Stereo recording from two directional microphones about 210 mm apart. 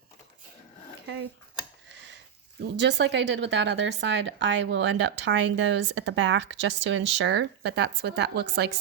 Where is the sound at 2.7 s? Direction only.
55° right (ahead or behind).